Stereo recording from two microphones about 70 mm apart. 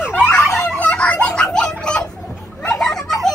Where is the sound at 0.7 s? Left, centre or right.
Centre.